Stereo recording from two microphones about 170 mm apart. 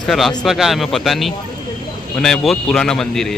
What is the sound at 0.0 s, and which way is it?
A man's voice, centre (ahead or behind).